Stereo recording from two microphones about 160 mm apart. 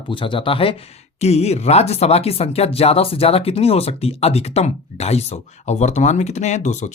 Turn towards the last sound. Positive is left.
turn(degrees=45)  # may be behind; listen again after turning